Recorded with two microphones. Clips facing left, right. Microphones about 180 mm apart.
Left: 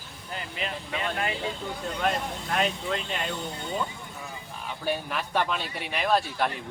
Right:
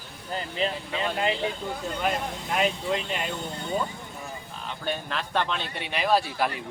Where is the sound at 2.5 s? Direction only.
10° right (ahead or behind).